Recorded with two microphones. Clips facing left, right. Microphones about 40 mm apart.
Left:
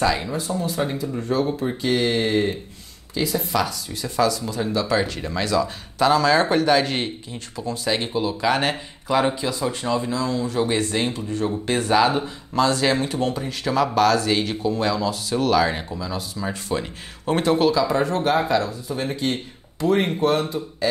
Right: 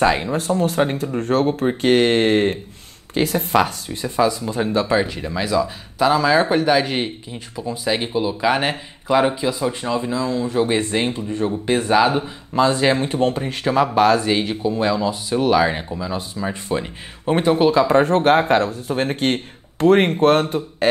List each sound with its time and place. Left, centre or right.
0.0 s speech: right
0.3 s speech: right
5.0 s speech: centre
11.4 s speech: centre
13.2 s speech: right; by 17.7 s centre
17.7 s speech: right